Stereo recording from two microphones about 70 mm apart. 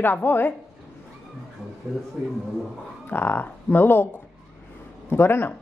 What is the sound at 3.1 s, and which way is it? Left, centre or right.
Speech, left.